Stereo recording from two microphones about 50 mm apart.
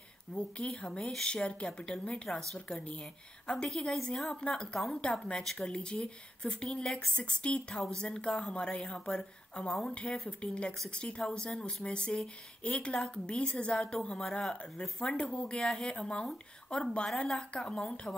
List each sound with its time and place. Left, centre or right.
0.3 s a woman's voice: left